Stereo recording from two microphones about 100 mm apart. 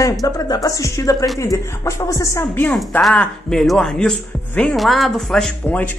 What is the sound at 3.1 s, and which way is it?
Speech, 10° left (ahead or behind).